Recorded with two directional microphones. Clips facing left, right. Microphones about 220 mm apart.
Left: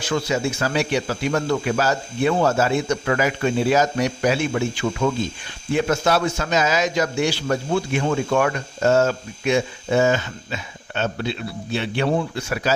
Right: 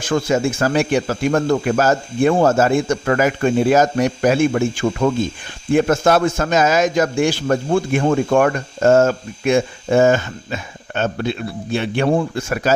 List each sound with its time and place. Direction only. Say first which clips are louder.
0.0 s a man's voice: right 5 dB; 50° right (ahead or behind)